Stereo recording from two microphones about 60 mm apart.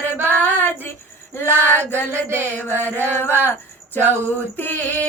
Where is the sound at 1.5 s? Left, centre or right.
Right.